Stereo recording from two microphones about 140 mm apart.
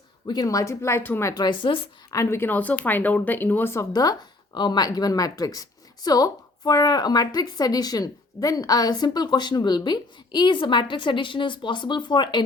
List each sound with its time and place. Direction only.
0.3 s a woman's voice: 25° left (ahead or behind)
1.3 s speech: 30° left (ahead or behind)
2.0 s a woman's voice: 20° left (ahead or behind)